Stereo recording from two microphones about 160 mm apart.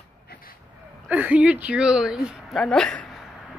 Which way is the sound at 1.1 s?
10° right (ahead or behind).